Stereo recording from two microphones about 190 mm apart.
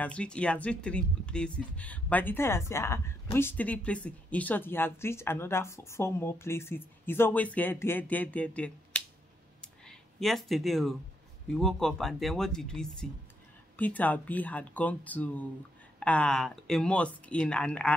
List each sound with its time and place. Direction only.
0.0 s speech: 5° left (ahead or behind)